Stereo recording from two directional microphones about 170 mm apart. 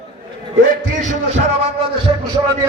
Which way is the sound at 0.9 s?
45° right (ahead or behind).